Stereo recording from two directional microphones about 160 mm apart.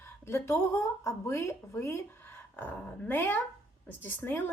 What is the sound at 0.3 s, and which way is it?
Speech, 15° left (ahead or behind).